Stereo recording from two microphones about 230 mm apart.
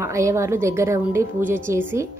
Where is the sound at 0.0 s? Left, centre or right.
Centre.